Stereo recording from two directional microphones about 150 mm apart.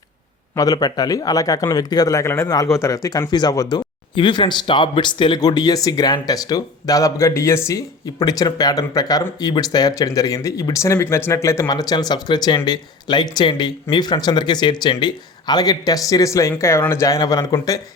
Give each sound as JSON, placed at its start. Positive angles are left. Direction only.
{"t": 0.5, "sound": "speech", "side_deg": 25}